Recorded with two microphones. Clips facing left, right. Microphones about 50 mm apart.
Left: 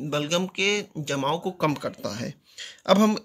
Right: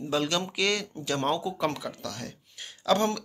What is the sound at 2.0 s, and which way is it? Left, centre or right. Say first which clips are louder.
Speech: left 5 dB; left.